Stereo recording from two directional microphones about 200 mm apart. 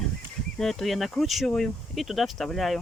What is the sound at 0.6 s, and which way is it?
Speech, centre (ahead or behind).